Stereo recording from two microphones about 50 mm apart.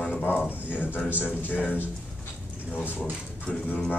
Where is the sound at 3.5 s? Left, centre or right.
Centre.